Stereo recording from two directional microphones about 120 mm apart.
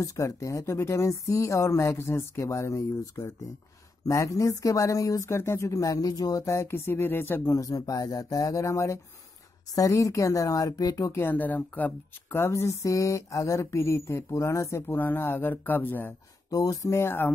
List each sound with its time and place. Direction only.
0.0 s speech: 25° left (ahead or behind)
11.1 s speech: 15° left (ahead or behind)
16.4 s speech: 30° left (ahead or behind)